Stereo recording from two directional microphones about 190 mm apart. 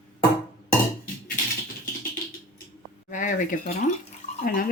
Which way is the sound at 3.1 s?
40° left (ahead or behind).